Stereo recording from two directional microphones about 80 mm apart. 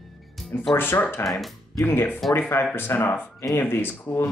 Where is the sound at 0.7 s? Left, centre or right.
Left.